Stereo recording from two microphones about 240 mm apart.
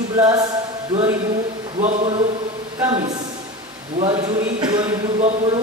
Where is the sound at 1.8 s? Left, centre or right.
Right.